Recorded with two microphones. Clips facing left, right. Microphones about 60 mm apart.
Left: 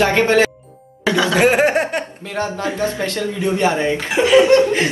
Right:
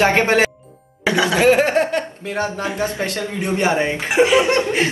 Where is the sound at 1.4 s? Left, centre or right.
Left.